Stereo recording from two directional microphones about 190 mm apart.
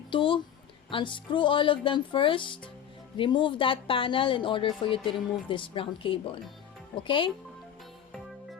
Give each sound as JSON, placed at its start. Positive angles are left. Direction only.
{"t": 0.1, "sound": "a woman's voice", "side_deg": 25}